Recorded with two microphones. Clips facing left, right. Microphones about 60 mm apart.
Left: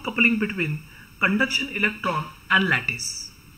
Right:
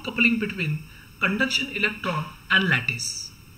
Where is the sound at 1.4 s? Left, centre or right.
Left.